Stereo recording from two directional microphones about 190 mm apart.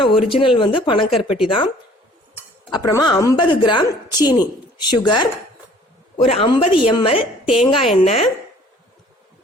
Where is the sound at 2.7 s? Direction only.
20° left (ahead or behind).